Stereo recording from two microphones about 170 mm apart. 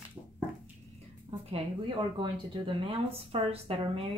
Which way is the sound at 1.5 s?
30° right (ahead or behind).